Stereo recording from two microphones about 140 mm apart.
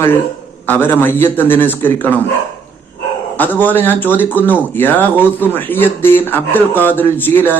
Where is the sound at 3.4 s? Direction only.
15° left (ahead or behind).